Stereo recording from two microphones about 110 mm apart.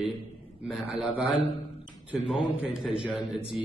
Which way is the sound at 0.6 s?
5° right (ahead or behind).